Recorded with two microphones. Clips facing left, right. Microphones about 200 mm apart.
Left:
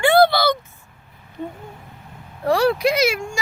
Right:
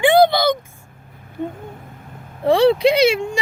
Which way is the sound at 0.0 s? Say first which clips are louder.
Right 2 dB; 15° right (ahead or behind).